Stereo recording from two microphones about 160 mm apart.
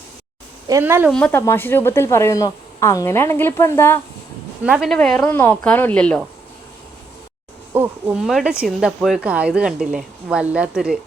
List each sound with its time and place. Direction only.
0.7 s speech: 15° right (ahead or behind)
1.1 s a woman's voice: 5° left (ahead or behind)
4.6 s speech: 5° right (ahead or behind)
4.9 s a woman's voice: 10° left (ahead or behind)
7.7 s speech: 15° right (ahead or behind)
8.2 s speech: centre (ahead or behind)